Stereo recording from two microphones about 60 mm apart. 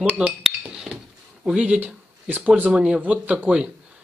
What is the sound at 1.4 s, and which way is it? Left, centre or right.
Speech, right.